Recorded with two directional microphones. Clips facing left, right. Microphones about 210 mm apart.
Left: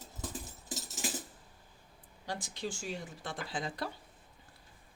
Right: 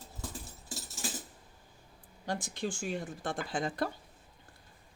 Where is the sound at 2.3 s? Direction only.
50° right (ahead or behind).